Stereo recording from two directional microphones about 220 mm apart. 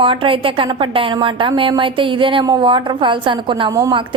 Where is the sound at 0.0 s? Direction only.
25° right (ahead or behind).